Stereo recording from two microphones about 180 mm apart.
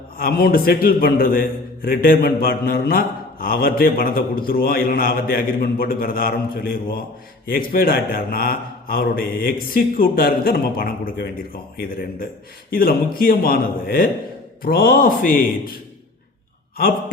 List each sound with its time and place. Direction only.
0.2 s a man's voice: 55° left (ahead or behind)